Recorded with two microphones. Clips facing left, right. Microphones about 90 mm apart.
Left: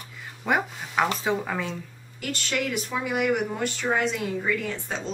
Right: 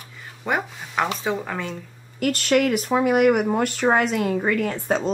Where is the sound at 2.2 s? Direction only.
55° right (ahead or behind).